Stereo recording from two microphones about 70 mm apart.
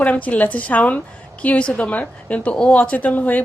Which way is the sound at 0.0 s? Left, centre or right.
Left.